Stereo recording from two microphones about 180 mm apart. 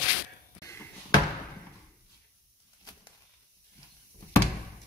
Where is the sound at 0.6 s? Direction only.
15° left (ahead or behind).